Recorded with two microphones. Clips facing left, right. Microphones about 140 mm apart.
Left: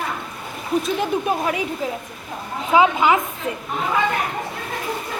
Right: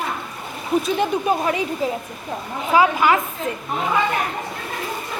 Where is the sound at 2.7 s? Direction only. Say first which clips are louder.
Left 1 dB; 20° left (ahead or behind).